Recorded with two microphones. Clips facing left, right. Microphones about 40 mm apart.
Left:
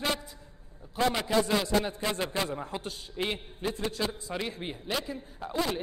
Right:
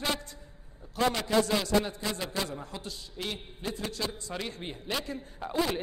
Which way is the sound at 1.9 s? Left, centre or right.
Left.